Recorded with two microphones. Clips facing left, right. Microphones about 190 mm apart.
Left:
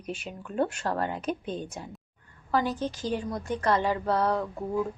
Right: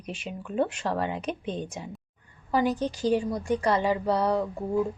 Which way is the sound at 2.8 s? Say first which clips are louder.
Right 5 dB; 40° right (ahead or behind).